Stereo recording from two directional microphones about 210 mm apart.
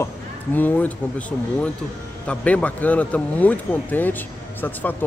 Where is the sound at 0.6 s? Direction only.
10° left (ahead or behind).